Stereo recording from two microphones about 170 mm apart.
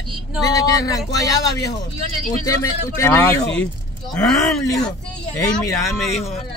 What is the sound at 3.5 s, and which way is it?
Speech, 5° left (ahead or behind).